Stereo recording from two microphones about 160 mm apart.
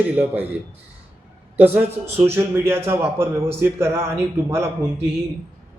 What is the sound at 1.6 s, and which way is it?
Speech, 10° right (ahead or behind).